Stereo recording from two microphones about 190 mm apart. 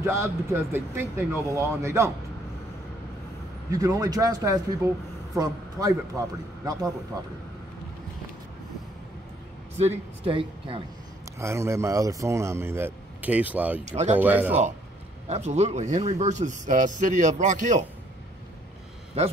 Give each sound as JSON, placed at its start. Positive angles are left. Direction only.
{"t": 0.0, "sound": "speech", "side_deg": -15}
{"t": 3.7, "sound": "speech", "side_deg": -20}
{"t": 9.8, "sound": "speech", "side_deg": -30}
{"t": 11.3, "sound": "speech", "side_deg": -15}
{"t": 13.8, "sound": "a man's voice", "side_deg": -35}
{"t": 14.1, "sound": "speech", "side_deg": -10}
{"t": 15.2, "sound": "a man's voice", "side_deg": -35}